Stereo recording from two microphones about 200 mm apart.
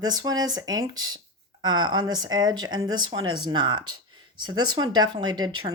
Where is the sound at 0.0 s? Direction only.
20° right (ahead or behind).